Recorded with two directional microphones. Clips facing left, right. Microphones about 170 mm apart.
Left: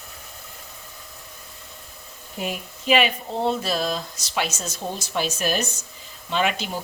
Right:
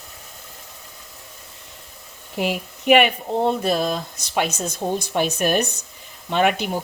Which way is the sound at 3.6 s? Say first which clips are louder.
Right 4 dB; 55° right (ahead or behind).